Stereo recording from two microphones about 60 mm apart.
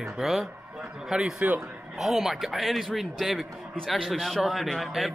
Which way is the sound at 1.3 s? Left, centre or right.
Right.